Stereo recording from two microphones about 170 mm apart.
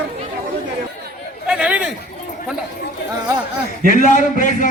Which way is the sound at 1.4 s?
5° right (ahead or behind).